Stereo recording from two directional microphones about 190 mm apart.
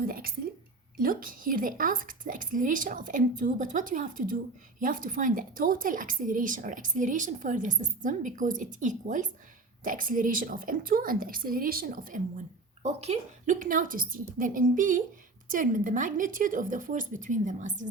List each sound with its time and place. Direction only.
0.0 s a sound: 50° right (ahead or behind)
0.9 s a woman's voice: 50° right (ahead or behind)
12.8 s a woman's voice: 35° right (ahead or behind)